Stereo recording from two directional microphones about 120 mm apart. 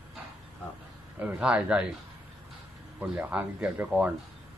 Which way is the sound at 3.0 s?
10° right (ahead or behind).